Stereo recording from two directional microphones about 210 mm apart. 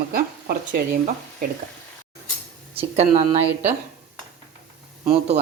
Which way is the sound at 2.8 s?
30° right (ahead or behind).